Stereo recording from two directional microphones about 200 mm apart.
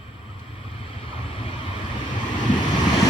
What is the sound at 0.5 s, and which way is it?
Vehicle, 25° left (ahead or behind).